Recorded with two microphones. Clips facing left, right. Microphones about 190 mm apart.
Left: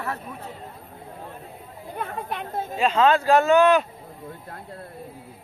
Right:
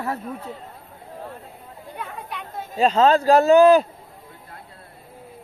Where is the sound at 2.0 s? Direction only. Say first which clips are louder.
Left 4 dB; 50° left (ahead or behind).